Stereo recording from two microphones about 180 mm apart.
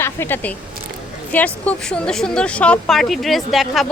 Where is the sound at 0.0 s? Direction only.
10° left (ahead or behind).